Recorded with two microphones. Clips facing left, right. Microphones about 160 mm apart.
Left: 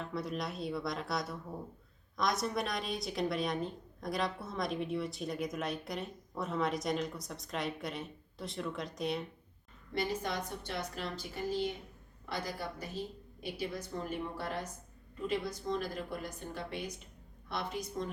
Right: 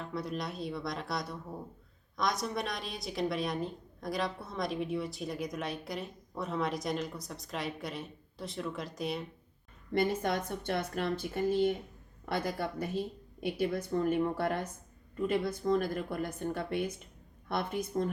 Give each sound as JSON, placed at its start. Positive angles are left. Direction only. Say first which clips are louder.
{"t": 0.0, "sound": "a woman's voice", "louder": "right 1 dB", "side_deg": 0}
{"t": 9.9, "sound": "a woman's voice", "louder": "right 5 dB", "side_deg": -55}